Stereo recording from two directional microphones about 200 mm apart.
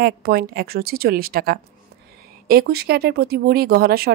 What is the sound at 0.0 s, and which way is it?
Speech, 50° right (ahead or behind).